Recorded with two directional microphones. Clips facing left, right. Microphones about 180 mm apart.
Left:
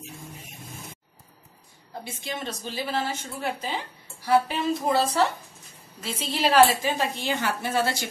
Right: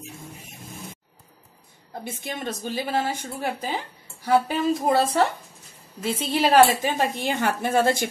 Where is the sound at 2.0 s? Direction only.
50° right (ahead or behind).